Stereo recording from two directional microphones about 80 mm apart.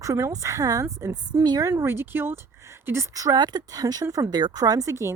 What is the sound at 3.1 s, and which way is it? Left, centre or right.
Speech, right.